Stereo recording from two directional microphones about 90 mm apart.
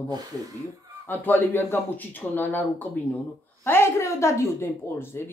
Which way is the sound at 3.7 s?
30° left (ahead or behind).